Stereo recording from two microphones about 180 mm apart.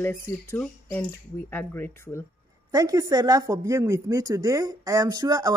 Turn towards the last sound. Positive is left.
turn(degrees=-20)  # may be behind; listen again after turning